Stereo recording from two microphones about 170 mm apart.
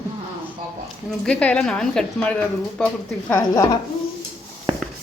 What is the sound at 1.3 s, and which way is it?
Speech, 5° left (ahead or behind).